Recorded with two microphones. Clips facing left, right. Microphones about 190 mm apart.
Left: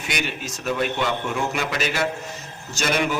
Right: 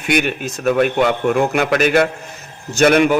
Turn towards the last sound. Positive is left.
turn(degrees=-60)  # may be behind; listen again after turning